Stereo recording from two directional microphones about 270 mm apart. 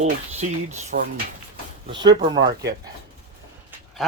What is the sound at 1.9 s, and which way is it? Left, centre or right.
Speech, centre.